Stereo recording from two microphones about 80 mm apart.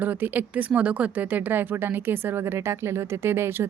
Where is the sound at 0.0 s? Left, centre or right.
Right.